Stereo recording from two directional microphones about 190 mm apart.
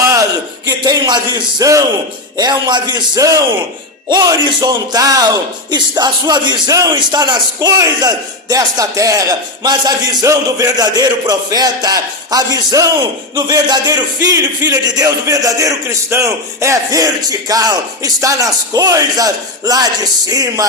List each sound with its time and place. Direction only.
0.0 s a man's voice: 15° right (ahead or behind)